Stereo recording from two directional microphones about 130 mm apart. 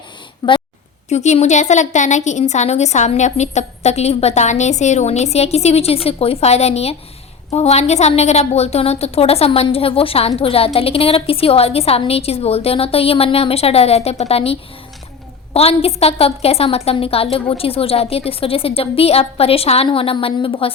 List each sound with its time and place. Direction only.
0.4 s speech: 30° left (ahead or behind)
1.1 s a woman's voice: 60° left (ahead or behind); by 20.7 s 45° left (ahead or behind)